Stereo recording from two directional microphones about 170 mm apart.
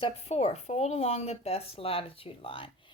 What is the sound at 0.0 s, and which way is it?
A woman's voice, 35° left (ahead or behind).